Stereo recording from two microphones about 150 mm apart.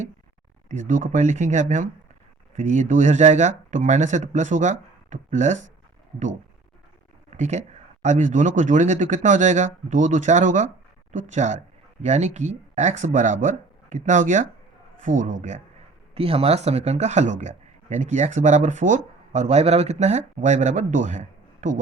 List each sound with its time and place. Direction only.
0.7 s speech: 55° right (ahead or behind)
7.3 s speech: 50° right (ahead or behind)
16.1 s speech: 40° right (ahead or behind)